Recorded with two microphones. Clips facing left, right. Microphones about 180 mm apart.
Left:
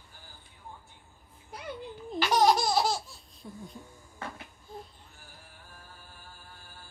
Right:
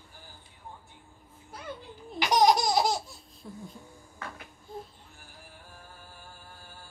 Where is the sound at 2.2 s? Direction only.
15° right (ahead or behind).